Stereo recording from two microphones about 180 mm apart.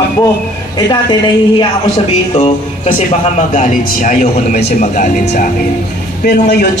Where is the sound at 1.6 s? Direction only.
35° left (ahead or behind).